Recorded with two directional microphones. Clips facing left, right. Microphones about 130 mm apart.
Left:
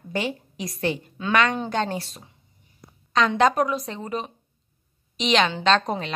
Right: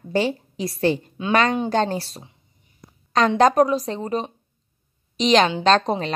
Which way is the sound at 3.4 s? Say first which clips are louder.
Right 7 dB; 40° right (ahead or behind).